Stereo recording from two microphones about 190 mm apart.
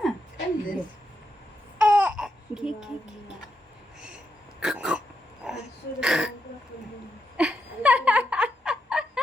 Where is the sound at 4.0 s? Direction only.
5° right (ahead or behind).